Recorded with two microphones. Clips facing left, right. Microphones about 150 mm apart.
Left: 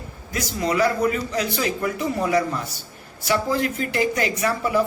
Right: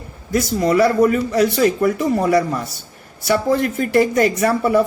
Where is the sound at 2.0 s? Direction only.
50° right (ahead or behind).